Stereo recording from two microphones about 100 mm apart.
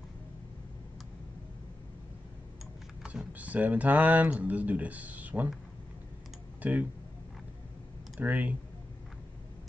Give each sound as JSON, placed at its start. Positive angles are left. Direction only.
{"t": 3.0, "sound": "power windows", "side_deg": -5}
{"t": 3.3, "sound": "speech", "side_deg": -15}
{"t": 6.6, "sound": "speech", "side_deg": -15}
{"t": 8.2, "sound": "speech", "side_deg": -15}